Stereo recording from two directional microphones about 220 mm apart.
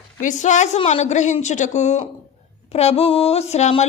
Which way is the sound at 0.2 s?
35° left (ahead or behind).